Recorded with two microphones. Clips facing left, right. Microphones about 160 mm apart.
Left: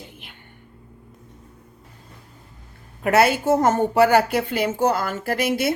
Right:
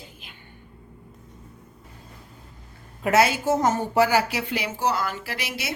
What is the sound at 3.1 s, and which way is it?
A woman's voice, 55° left (ahead or behind).